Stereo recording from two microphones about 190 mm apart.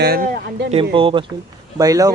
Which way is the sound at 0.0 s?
55° right (ahead or behind).